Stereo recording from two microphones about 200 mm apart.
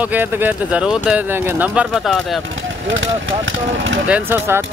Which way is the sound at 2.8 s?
70° right (ahead or behind).